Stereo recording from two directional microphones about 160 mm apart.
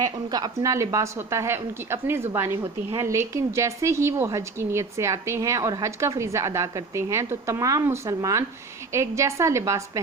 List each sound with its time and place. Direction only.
0.3 s a woman's voice: 25° right (ahead or behind)